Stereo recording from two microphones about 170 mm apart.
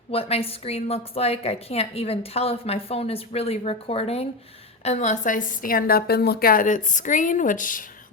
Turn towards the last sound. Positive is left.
turn(degrees=50)  # may be behind; listen again after turning